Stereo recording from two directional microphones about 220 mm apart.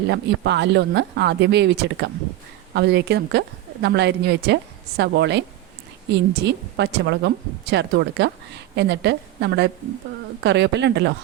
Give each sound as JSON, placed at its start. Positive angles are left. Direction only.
{"t": 0.1, "sound": "a woman's voice", "side_deg": -50}